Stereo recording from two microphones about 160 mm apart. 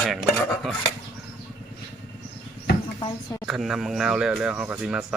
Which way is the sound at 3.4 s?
5° right (ahead or behind).